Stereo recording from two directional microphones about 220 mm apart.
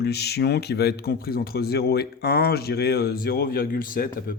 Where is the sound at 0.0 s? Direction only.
45° left (ahead or behind).